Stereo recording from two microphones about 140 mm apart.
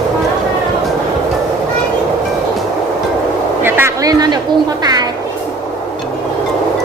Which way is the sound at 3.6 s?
15° right (ahead or behind).